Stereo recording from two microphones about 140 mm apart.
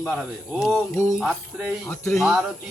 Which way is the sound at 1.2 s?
5° right (ahead or behind).